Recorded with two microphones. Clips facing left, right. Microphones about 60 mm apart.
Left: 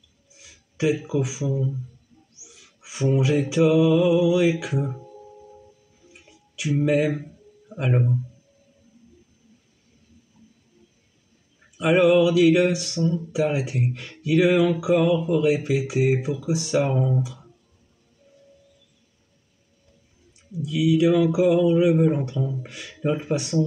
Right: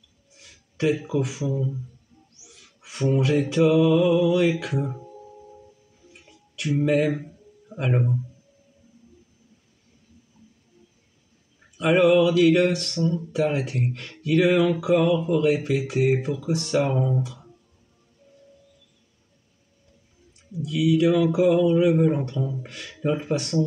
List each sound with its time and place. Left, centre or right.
0.3 s speech: centre
2.3 s mantra: centre
6.1 s a sound: centre
6.8 s speech: centre
11.8 s speech: centre
20.6 s speech: centre